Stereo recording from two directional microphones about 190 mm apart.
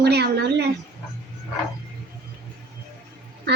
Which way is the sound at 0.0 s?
60° right (ahead or behind).